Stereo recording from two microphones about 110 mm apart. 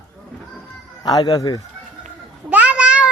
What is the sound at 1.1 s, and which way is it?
Speech, 35° left (ahead or behind).